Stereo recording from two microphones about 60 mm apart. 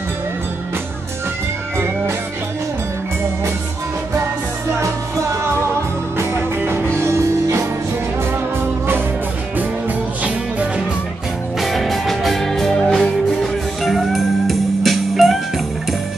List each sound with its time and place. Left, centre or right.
4.7 s music: right
6.6 s music: right
11.6 s music: centre